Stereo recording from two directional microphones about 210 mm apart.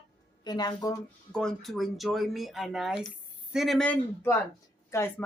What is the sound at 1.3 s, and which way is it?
Speech, 5° left (ahead or behind).